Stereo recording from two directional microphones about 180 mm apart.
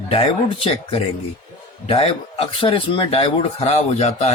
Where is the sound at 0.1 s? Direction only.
30° left (ahead or behind).